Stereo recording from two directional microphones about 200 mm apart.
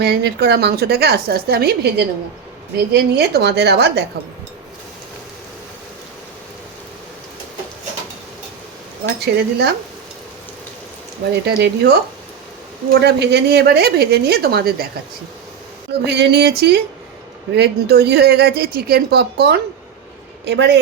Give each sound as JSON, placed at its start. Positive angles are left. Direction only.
{"t": 0.0, "sound": "a woman's voice", "side_deg": -55}
{"t": 9.0, "sound": "a woman's voice", "side_deg": -55}
{"t": 11.3, "sound": "a woman's voice", "side_deg": -55}
{"t": 16.0, "sound": "a woman's voice", "side_deg": -55}